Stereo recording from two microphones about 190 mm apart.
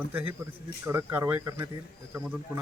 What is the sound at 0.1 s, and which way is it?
A man's voice, 10° right (ahead or behind).